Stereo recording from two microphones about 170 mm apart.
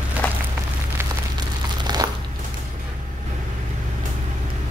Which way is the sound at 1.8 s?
25° right (ahead or behind).